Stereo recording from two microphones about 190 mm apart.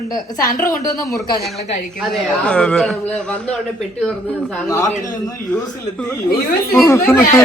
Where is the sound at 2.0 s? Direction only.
5° left (ahead or behind).